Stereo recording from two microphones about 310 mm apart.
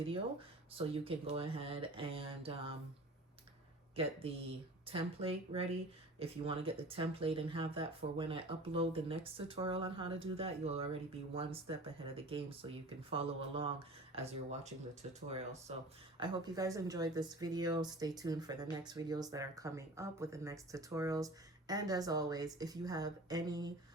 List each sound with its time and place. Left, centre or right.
0.1 s speech: centre
4.0 s speech: centre
16.2 s speech: centre